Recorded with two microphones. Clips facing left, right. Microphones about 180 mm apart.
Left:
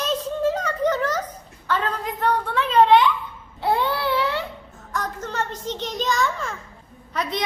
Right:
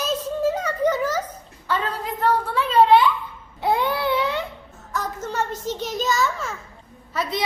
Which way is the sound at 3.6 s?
15° right (ahead or behind).